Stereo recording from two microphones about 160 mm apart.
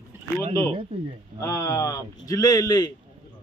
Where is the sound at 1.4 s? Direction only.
20° left (ahead or behind).